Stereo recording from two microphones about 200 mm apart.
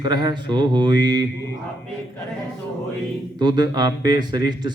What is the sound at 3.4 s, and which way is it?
Speech, 20° right (ahead or behind).